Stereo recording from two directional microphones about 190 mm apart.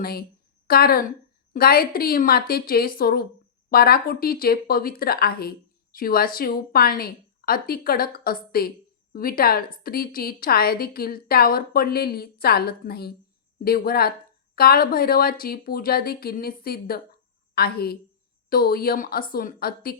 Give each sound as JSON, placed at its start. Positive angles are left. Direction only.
{"t": 0.0, "sound": "a woman's voice", "side_deg": 55}